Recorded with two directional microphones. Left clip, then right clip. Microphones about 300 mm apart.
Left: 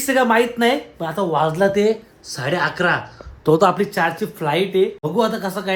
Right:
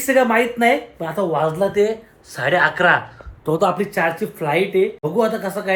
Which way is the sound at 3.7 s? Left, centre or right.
Centre.